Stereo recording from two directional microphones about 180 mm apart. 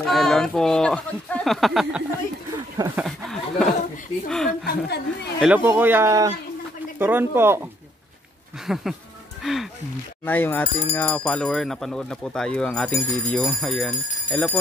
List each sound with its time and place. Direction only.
0.0 s speech: centre (ahead or behind)
4.6 s a woman's voice: 65° left (ahead or behind)
5.4 s a man's voice: 10° right (ahead or behind)
8.6 s speech: centre (ahead or behind)
9.4 s music: centre (ahead or behind)
10.2 s speech: 10° left (ahead or behind)